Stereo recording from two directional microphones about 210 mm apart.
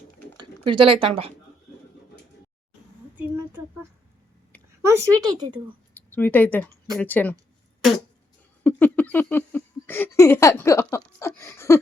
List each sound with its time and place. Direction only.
0.3 s speech: 25° right (ahead or behind)
4.8 s speech: 15° right (ahead or behind)
5.9 s speech: 10° left (ahead or behind)
8.6 s a sound: 10° left (ahead or behind)